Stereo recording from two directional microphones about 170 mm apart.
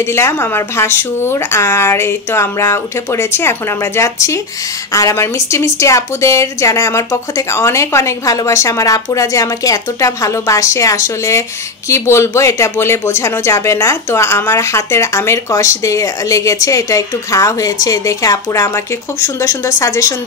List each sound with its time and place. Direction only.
0.0 s speech: 15° left (ahead or behind)